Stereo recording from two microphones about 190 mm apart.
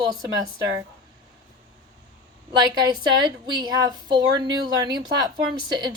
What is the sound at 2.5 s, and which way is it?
Speech, 20° right (ahead or behind).